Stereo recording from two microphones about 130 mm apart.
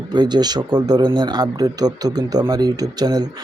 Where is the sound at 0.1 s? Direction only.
35° right (ahead or behind).